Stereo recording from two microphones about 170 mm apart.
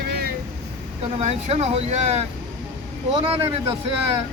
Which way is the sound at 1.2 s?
40° right (ahead or behind).